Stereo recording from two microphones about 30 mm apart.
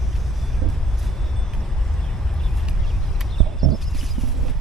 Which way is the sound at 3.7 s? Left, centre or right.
Centre.